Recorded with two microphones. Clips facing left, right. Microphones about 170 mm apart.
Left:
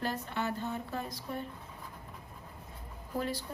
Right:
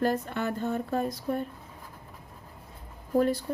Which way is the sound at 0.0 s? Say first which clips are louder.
Right 7 dB; 50° right (ahead or behind).